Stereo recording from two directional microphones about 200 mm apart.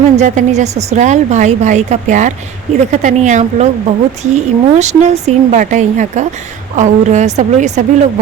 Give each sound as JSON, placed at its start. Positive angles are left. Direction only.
{"t": 0.2, "sound": "a woman's voice", "side_deg": -35}